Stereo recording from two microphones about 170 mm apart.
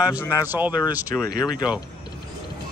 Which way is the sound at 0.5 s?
10° right (ahead or behind).